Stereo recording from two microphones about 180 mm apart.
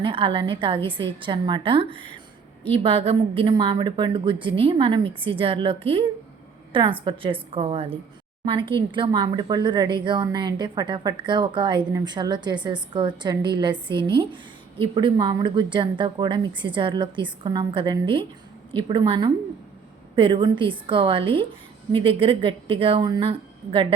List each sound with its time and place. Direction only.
0.0 s a woman's voice: 30° right (ahead or behind)